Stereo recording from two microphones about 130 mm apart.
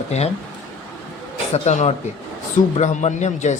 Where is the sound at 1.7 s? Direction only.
60° left (ahead or behind).